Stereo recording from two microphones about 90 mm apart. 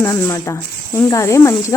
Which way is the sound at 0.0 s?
30° left (ahead or behind).